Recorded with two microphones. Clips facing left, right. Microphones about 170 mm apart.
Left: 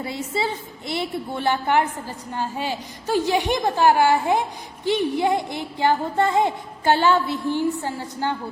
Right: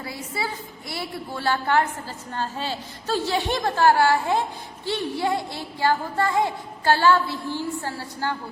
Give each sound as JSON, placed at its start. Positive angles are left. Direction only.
{"t": 0.0, "sound": "a woman's voice", "side_deg": 25}